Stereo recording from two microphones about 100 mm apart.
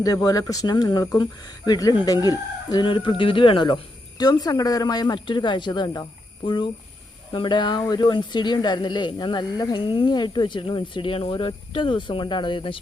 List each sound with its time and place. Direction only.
0.0 s speech: 35° left (ahead or behind); by 3.8 s 55° left (ahead or behind)
4.2 s speech: 40° left (ahead or behind)